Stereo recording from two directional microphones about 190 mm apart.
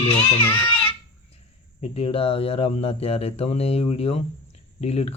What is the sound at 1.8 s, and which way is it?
Speech, 30° left (ahead or behind).